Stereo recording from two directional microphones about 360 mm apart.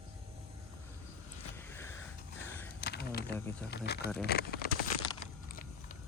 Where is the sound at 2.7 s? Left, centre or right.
Left.